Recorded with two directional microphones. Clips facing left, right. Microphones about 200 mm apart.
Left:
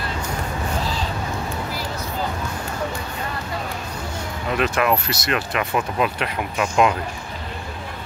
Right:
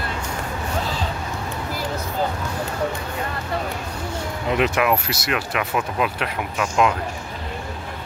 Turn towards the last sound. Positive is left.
turn(degrees=5)  # may be behind; listen again after turning